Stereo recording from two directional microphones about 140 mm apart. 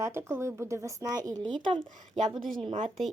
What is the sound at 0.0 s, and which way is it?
Speech, 20° right (ahead or behind).